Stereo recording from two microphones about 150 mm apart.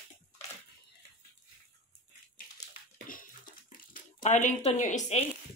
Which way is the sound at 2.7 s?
65° left (ahead or behind).